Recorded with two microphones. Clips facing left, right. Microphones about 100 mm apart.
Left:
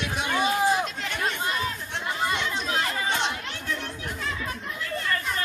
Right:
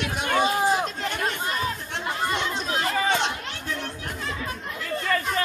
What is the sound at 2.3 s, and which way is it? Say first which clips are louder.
Chatter: right 1 dB; 35° right (ahead or behind).